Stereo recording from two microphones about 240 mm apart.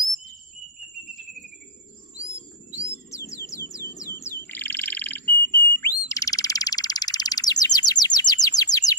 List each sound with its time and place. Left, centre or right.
4.2 s frog: centre